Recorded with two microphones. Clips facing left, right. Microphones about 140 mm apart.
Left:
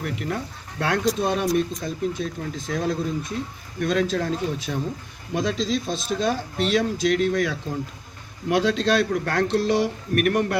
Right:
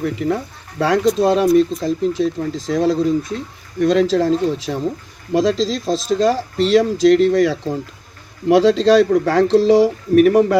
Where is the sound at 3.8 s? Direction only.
85° right.